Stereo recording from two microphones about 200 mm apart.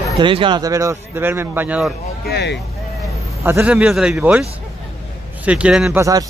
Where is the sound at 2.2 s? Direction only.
55° left (ahead or behind).